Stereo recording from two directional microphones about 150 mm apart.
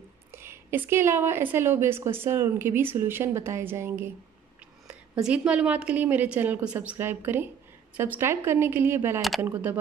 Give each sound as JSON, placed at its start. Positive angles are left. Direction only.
{"t": 0.3, "sound": "a woman's voice", "side_deg": -15}